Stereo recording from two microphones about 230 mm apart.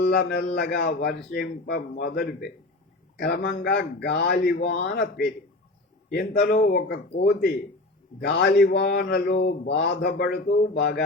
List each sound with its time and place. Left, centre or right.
0.0 s speech: left